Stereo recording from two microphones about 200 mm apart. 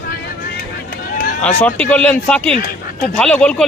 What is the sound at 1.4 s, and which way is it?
Speech, 5° left (ahead or behind).